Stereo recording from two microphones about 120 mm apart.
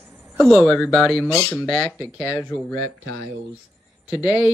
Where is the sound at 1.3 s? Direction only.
25° left (ahead or behind).